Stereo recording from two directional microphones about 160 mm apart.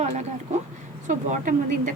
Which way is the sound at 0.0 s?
45° right (ahead or behind).